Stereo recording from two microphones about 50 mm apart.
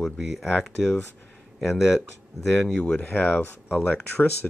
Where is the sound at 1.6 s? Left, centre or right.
Centre.